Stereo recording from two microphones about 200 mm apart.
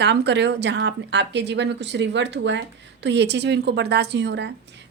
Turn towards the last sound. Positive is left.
turn(degrees=-60)  # may be behind; listen again after turning